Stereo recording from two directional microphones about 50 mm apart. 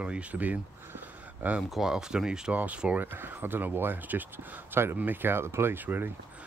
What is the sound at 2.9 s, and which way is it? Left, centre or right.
Speech, right.